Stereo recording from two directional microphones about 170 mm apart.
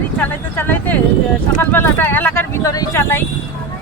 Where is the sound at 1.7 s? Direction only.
10° left (ahead or behind).